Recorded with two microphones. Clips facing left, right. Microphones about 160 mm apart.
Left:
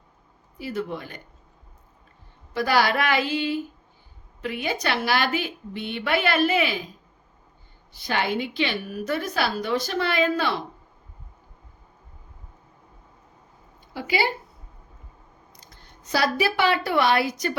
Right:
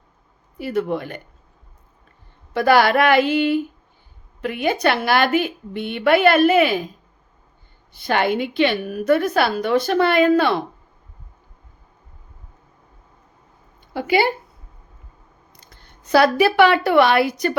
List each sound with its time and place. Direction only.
0.6 s a woman's voice: 60° right (ahead or behind)
2.5 s a woman's voice: 60° right (ahead or behind)
7.9 s a woman's voice: 55° right (ahead or behind)
13.9 s speech: 55° right (ahead or behind)
15.5 s speech: 60° right (ahead or behind)